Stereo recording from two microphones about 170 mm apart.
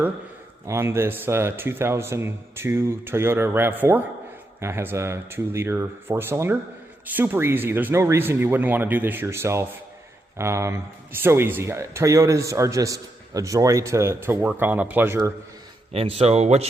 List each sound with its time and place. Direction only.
0.7 s speech: 15° right (ahead or behind)
15.9 s speech: 35° right (ahead or behind)